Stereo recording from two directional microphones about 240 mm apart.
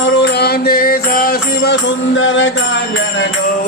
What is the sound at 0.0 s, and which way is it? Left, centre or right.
Mantra, left.